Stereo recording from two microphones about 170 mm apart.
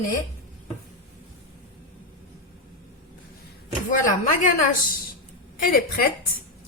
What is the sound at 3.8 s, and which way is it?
Speech, 50° left (ahead or behind).